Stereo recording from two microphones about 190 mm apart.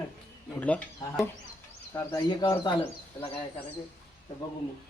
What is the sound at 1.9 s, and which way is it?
Speech, 20° left (ahead or behind).